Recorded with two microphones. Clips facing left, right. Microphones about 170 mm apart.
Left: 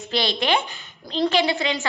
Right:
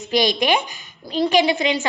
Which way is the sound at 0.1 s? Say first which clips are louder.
Right 4 dB; 15° right (ahead or behind).